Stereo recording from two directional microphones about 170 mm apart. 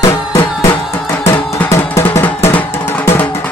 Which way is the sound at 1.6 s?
15° left (ahead or behind).